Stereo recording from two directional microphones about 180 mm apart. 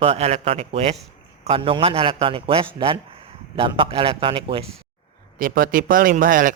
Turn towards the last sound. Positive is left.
turn(degrees=-50)  # may be behind; listen again after turning